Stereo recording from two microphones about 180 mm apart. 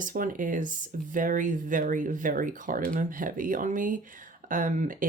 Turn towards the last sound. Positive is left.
turn(degrees=-45)  # may be behind; listen again after turning